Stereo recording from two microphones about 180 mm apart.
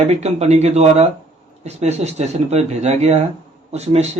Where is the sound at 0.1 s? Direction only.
35° right (ahead or behind).